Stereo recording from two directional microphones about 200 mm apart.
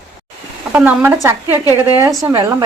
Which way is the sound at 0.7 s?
5° right (ahead or behind).